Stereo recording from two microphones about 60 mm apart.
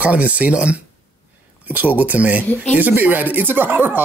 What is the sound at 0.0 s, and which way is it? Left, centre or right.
Speech, right.